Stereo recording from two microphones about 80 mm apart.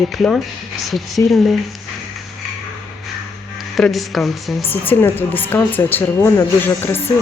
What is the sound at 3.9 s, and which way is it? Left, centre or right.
Speech, centre.